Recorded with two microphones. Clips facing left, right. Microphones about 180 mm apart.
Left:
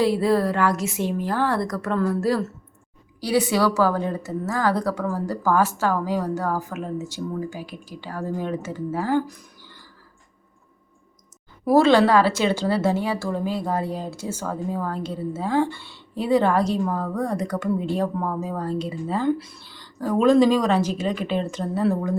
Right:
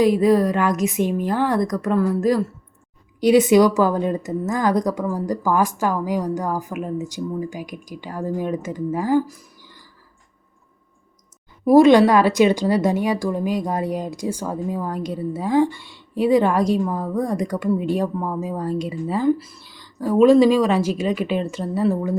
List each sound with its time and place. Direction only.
0.0 s a woman's voice: 15° right (ahead or behind)
11.6 s a woman's voice: 15° right (ahead or behind)